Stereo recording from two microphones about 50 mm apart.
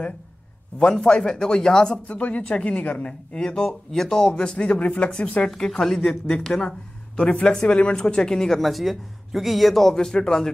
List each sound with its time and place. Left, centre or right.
1.0 s speech: centre
2.0 s speech: left